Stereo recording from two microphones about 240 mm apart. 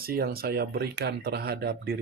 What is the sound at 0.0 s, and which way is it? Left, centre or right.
Speech, right.